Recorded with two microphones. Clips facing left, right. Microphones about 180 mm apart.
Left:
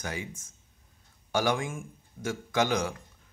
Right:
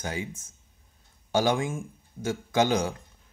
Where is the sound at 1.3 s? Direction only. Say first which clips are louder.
Right 3 dB; 25° right (ahead or behind).